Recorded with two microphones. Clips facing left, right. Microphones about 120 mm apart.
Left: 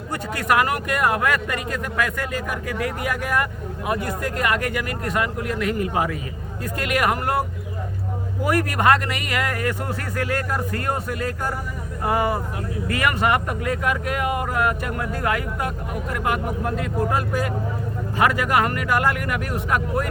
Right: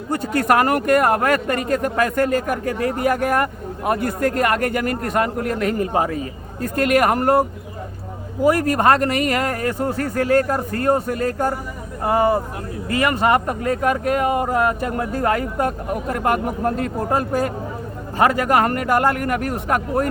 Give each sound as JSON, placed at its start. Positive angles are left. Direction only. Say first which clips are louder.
{"t": 0.1, "sound": "speech", "louder": "right 4 dB", "side_deg": -45}
{"t": 8.4, "sound": "speech", "louder": "right 4 dB", "side_deg": -35}
{"t": 12.0, "sound": "speech", "louder": "right 5 dB", "side_deg": -30}